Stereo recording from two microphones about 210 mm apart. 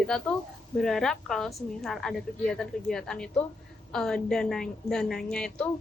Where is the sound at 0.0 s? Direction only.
5° left (ahead or behind).